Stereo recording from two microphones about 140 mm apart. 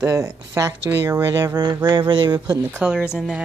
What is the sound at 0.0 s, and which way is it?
Speech, 20° right (ahead or behind).